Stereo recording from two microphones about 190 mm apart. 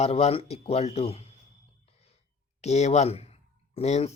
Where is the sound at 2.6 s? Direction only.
35° left (ahead or behind).